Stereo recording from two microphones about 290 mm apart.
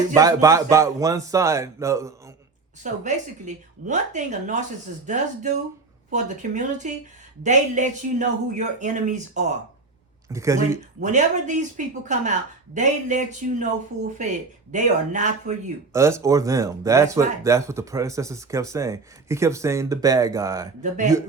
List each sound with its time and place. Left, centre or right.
0.1 s speech: centre
2.8 s speech: right
10.2 s speech: centre
11.0 s speech: right
15.9 s speech: centre